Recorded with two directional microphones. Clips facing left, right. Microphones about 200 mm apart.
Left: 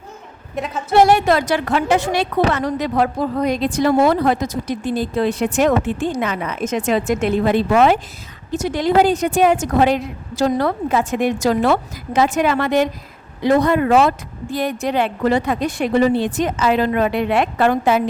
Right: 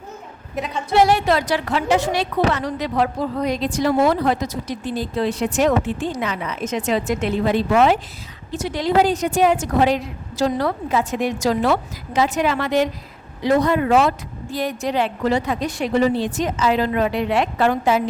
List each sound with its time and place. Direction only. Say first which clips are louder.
0.5 s a woman's voice: left 2 dB; centre (ahead or behind)
0.9 s a woman's voice: left 3 dB; 50° left (ahead or behind)